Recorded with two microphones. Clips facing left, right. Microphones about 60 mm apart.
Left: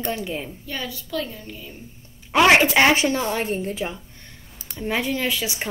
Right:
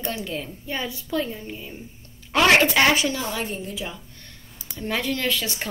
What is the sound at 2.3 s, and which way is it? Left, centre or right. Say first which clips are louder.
A woman's voice: left 2 dB; centre.